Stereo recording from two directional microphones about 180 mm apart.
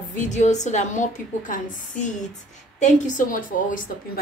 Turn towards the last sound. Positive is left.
turn(degrees=50)  # may be behind; listen again after turning